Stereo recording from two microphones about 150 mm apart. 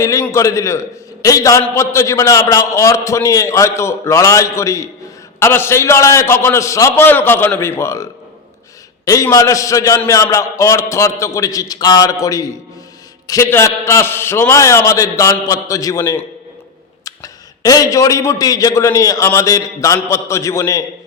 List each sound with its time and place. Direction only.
0.0 s a man's voice: 20° left (ahead or behind)
9.0 s a man's voice: 20° left (ahead or behind)